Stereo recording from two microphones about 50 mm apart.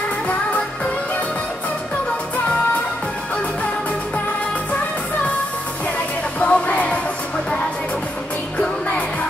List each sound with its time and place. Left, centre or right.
6.4 s music: left
8.5 s music: left